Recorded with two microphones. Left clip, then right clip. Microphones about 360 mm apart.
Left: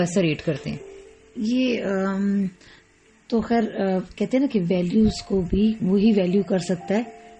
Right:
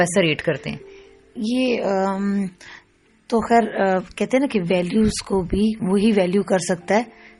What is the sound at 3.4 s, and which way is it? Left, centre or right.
Mantra, centre.